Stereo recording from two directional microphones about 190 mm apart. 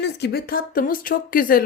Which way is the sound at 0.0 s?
60° left (ahead or behind).